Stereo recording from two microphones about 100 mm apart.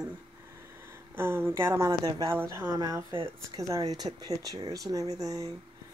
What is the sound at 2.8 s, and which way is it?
Speech, 35° right (ahead or behind).